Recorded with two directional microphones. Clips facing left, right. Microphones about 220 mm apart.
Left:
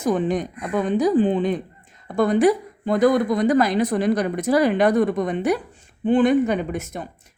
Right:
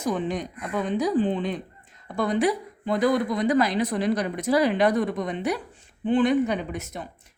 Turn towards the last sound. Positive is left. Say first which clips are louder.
# left 5 dB
turn(degrees=50)  # may be behind; listen again after turning